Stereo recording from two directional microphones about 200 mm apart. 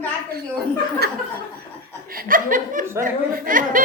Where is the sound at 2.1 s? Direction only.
45° right (ahead or behind).